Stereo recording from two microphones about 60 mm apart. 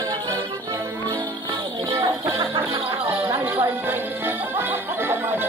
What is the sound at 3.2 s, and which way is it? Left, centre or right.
Music, right.